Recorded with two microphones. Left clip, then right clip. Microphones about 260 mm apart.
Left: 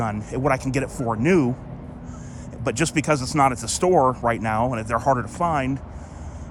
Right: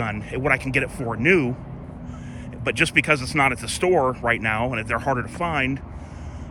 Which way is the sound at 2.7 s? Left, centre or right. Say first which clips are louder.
Right 3 dB; centre.